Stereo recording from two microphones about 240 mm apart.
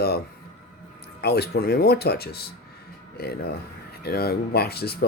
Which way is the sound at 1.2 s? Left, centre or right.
Left.